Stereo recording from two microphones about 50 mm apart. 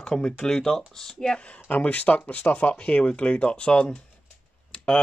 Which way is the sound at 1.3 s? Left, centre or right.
Left.